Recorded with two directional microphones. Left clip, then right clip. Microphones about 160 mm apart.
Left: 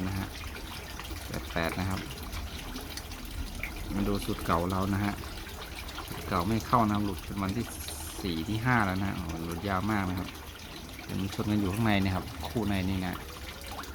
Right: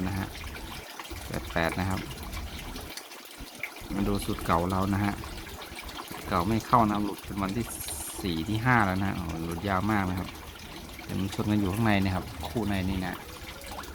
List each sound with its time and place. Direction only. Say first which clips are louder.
1.3 s water: right 3 dB; 15° right (ahead or behind)
4.1 s speech: right 2 dB; 10° right (ahead or behind)
6.3 s speech: right 3 dB; 10° right (ahead or behind)
11.3 s speech: right 2 dB; 10° right (ahead or behind)